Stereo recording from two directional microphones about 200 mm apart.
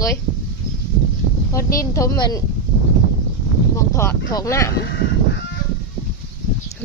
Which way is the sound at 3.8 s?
15° left (ahead or behind).